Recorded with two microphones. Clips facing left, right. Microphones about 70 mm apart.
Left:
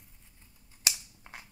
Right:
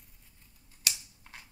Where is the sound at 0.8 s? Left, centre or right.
Left.